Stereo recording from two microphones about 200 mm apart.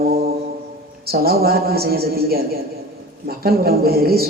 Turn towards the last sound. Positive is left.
turn(degrees=-50)  # may be behind; listen again after turning